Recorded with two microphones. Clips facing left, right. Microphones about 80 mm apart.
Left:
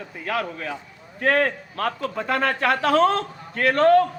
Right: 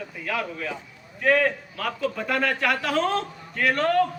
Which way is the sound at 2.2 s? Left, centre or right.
Left.